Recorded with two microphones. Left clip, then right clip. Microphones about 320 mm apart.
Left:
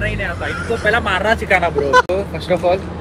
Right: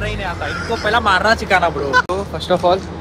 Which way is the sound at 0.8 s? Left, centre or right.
Centre.